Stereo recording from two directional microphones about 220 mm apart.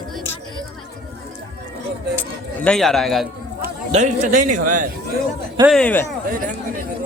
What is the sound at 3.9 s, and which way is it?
Speech, 30° right (ahead or behind).